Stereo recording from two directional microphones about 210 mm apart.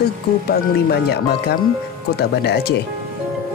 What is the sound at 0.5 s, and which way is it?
Speech, 50° left (ahead or behind).